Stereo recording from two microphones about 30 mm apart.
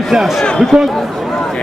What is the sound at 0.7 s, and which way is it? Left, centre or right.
Speech, right.